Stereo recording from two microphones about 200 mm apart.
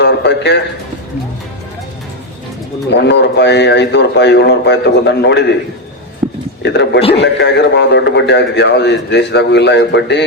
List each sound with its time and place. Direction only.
0.0 s a sound: 60° left (ahead or behind)
2.9 s a man's voice: 60° left (ahead or behind)
6.6 s a man's voice: 60° left (ahead or behind)